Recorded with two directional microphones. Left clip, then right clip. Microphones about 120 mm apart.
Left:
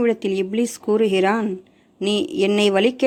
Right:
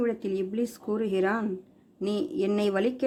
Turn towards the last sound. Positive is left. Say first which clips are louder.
# left 9 dB
turn(degrees=25)  # may be behind; listen again after turning